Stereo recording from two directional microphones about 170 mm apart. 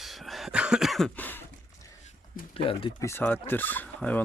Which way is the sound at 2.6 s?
35° left (ahead or behind).